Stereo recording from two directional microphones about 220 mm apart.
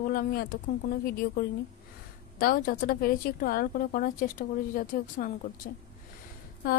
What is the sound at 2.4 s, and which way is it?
A woman's voice, 40° left (ahead or behind).